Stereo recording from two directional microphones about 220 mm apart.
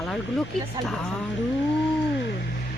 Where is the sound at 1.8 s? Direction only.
55° left (ahead or behind).